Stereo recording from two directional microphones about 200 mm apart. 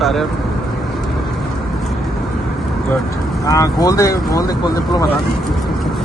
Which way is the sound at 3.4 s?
15° left (ahead or behind).